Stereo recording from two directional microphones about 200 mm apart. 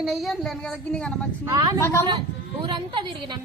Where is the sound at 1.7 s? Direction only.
15° left (ahead or behind).